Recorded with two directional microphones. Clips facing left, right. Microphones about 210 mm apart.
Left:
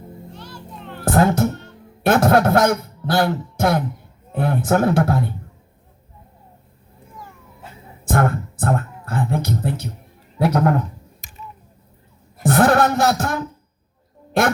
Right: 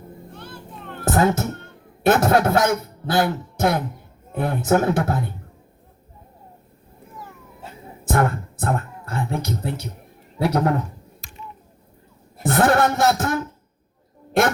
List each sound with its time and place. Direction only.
0.3 s children playing: 55° right (ahead or behind)
1.1 s a man's voice: 50° left (ahead or behind)
1.5 s music: 55° right (ahead or behind)
2.0 s a man's voice: 50° left (ahead or behind)
8.1 s speech: 55° left (ahead or behind)
10.4 s female singing: 55° left (ahead or behind)
12.5 s female singing: 55° left (ahead or behind)